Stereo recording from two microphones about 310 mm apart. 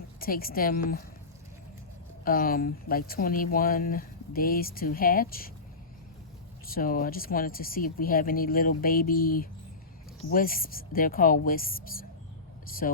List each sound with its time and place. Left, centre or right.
0.2 s speech: left
2.2 s speech: left
6.7 s speech: left